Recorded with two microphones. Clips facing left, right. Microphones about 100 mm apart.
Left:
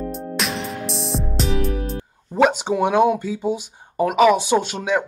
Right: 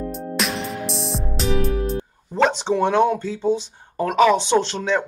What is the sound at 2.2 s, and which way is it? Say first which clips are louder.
Speech: left 2 dB; 10° left (ahead or behind).